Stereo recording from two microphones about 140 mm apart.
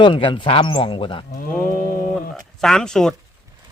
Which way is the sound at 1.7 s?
85° left.